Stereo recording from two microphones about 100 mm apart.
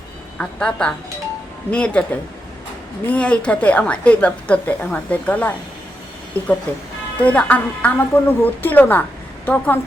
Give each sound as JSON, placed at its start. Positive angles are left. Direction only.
{"t": 0.3, "sound": "a woman's voice", "side_deg": 10}
{"t": 3.1, "sound": "a woman's voice", "side_deg": 10}